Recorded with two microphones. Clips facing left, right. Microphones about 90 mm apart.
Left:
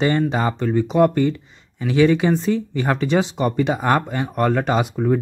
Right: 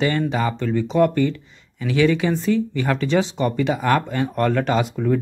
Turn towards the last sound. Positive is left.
turn(degrees=20)  # may be behind; listen again after turning